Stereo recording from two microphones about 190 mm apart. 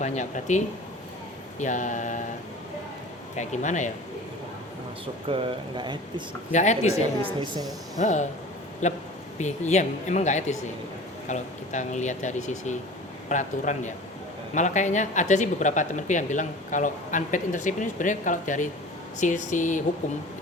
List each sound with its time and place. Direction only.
0.0 s speech: 40° left (ahead or behind)
3.3 s speech: 40° left (ahead or behind)
5.3 s speech: 25° right (ahead or behind)
6.5 s speech: 40° left (ahead or behind)
7.2 s speech: 25° right (ahead or behind)
7.9 s speech: 40° left (ahead or behind)